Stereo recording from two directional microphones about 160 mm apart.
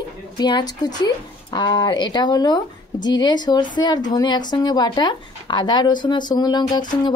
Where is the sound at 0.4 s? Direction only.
25° left (ahead or behind).